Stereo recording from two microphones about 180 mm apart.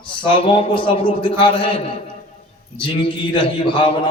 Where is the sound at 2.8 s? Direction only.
30° left (ahead or behind).